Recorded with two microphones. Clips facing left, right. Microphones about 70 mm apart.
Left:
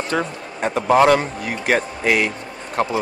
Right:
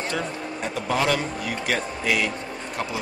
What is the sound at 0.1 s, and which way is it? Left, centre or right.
A man's voice, left.